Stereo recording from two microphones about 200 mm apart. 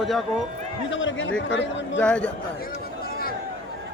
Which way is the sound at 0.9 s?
70° left (ahead or behind).